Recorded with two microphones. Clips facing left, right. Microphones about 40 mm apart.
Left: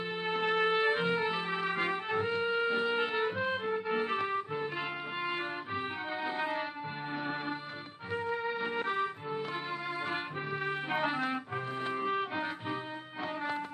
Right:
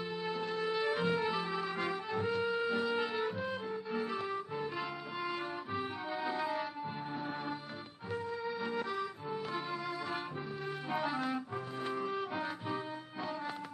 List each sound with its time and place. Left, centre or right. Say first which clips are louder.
0.2 s music: left 8 dB; left
8.1 s music: left 4 dB; left
10.9 s music: left 1 dB; left